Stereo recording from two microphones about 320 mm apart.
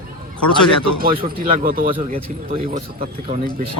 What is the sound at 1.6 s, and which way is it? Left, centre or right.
Speech, right.